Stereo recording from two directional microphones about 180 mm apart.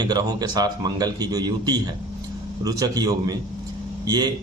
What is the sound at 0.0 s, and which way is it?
A man's voice, 20° right (ahead or behind).